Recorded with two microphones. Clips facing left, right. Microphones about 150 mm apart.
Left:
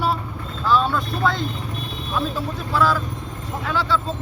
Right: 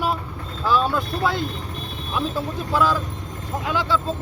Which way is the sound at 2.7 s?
15° right (ahead or behind).